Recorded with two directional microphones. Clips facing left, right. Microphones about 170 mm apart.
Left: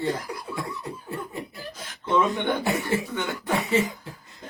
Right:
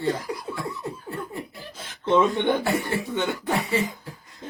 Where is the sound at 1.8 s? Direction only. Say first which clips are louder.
Right 3 dB; 25° right (ahead or behind).